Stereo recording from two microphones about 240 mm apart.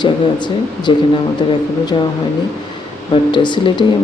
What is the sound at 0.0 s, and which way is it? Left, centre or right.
Speech, centre.